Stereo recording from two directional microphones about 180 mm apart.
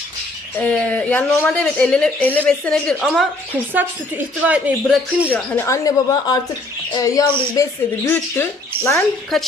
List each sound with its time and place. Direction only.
0.5 s a woman's voice: 10° left (ahead or behind); by 5.3 s 5° right (ahead or behind)
5.3 s speech: 10° left (ahead or behind)
9.3 s a woman's voice: centre (ahead or behind)